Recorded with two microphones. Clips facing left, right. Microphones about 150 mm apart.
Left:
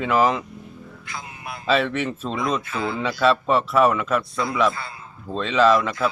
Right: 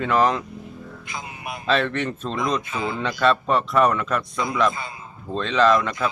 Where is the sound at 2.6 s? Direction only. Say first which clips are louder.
Left 1 dB; 15° right (ahead or behind).